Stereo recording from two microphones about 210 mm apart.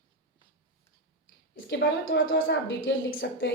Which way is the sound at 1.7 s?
60° left (ahead or behind).